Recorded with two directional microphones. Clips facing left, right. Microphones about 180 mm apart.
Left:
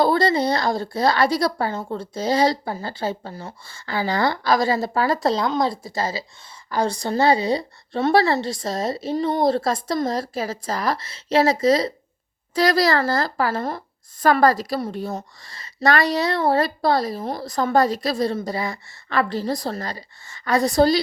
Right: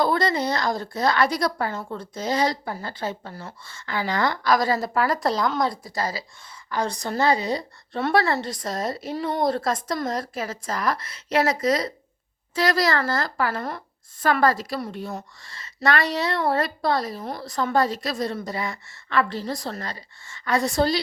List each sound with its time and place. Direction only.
0.0 s a woman's voice: 30° left (ahead or behind)